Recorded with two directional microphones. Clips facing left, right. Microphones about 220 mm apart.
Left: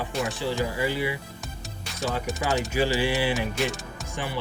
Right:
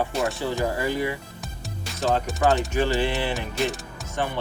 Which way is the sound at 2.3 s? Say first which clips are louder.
Right 5 dB; 5° left (ahead or behind).